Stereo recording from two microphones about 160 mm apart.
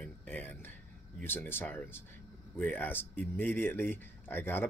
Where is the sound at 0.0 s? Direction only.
10° left (ahead or behind).